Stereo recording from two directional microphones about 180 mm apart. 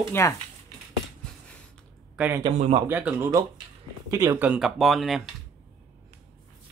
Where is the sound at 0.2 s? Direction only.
15° left (ahead or behind).